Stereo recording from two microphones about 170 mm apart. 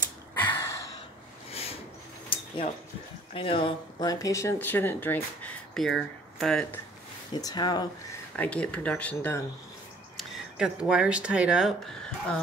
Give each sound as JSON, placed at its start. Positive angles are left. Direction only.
{"t": 0.3, "sound": "a sound", "side_deg": 15}
{"t": 1.5, "sound": "a sound", "side_deg": 35}
{"t": 3.3, "sound": "speech", "side_deg": 30}
{"t": 7.3, "sound": "speech", "side_deg": 25}
{"t": 8.4, "sound": "speech", "side_deg": 10}
{"t": 10.1, "sound": "speech", "side_deg": -5}